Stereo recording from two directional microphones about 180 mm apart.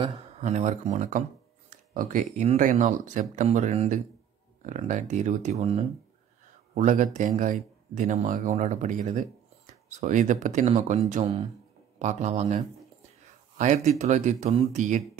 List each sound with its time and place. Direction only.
0.4 s speech: 40° right (ahead or behind)